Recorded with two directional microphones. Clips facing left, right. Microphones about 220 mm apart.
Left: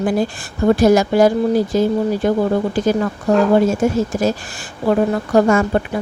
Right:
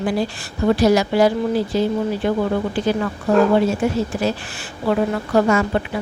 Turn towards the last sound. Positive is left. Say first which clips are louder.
# left 3 dB
turn(degrees=45)  # may be behind; listen again after turning